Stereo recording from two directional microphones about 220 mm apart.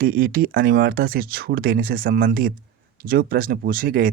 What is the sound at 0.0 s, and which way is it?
Speech, 40° right (ahead or behind).